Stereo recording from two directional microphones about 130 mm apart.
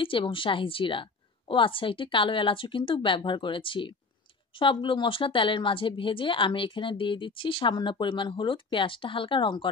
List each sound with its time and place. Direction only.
0.0 s a woman's voice: 40° left (ahead or behind)